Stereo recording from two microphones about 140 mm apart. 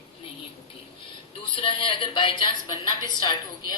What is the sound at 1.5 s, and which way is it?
A woman's voice, 35° left (ahead or behind).